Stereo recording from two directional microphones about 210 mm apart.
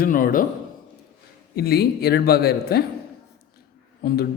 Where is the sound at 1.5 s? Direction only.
50° left (ahead or behind).